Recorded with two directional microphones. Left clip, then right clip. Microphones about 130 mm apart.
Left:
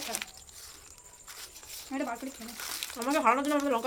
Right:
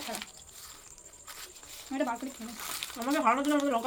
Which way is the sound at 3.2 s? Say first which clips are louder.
Left 1 dB; 35° left (ahead or behind).